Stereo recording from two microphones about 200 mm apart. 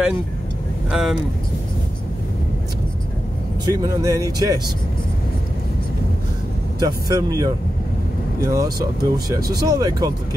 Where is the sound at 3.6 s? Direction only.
20° right (ahead or behind).